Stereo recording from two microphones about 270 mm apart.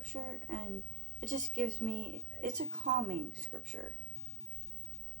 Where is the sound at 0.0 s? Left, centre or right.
Right.